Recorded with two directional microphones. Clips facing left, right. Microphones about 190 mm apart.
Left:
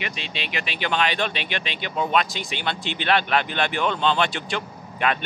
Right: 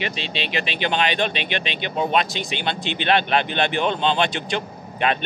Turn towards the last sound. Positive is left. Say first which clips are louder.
# right 2 dB
turn(degrees=-25)  # may be behind; listen again after turning